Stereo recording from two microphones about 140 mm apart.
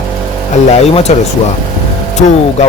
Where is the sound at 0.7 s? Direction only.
50° left (ahead or behind).